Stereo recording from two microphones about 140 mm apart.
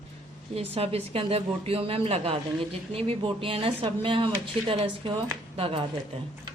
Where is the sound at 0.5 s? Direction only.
45° right (ahead or behind).